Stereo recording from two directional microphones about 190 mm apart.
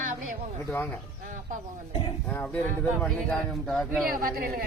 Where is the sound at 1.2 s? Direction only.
45° right (ahead or behind).